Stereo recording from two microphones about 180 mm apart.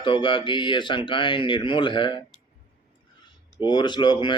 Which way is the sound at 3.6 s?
25° left (ahead or behind).